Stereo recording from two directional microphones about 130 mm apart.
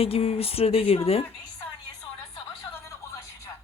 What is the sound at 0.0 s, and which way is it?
Speech, 50° left (ahead or behind).